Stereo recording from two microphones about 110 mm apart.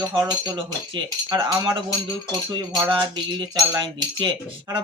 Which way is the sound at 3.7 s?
45° right (ahead or behind).